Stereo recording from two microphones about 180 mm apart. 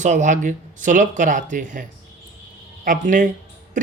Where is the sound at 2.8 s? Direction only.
45° right (ahead or behind).